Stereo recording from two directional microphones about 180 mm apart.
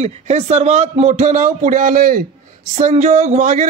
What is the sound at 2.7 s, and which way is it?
Speech, 40° right (ahead or behind).